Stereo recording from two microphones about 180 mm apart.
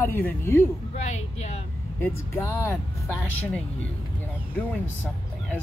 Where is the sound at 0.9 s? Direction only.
40° left (ahead or behind).